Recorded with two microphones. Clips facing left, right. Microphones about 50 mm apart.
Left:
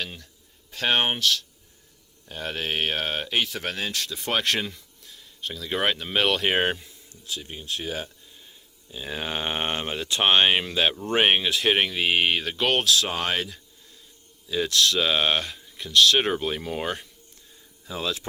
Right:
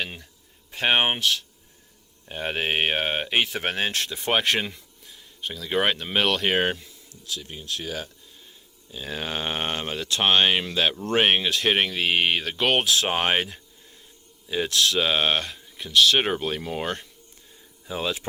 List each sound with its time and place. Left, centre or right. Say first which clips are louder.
0.0 s speech: right 2 dB; centre; by 4.2 s right
4.2 s speech: right 2 dB; right; by 6.8 s centre
7.3 s speech: even; left
8.9 s speech: even; centre
12.8 s speech: right 1 dB; right; by 17.1 s centre
17.8 s speech: right 2 dB; centre